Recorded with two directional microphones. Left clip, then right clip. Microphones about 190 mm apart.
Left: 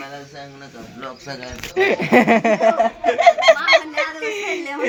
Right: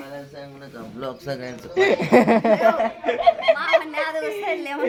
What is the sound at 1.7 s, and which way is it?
Speech, 5° right (ahead or behind).